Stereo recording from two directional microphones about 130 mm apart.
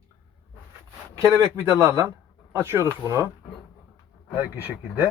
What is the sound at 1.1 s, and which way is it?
Speech, 20° right (ahead or behind).